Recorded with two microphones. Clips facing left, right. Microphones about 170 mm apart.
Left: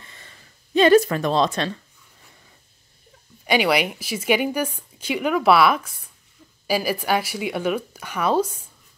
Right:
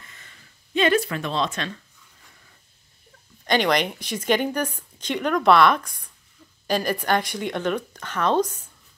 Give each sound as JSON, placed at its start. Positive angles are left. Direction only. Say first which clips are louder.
{"t": 0.0, "sound": "a sound", "louder": "left 3 dB", "side_deg": 30}
{"t": 0.7, "sound": "speech", "louder": "left 6 dB", "side_deg": 40}
{"t": 3.4, "sound": "speech", "louder": "left 1 dB", "side_deg": 10}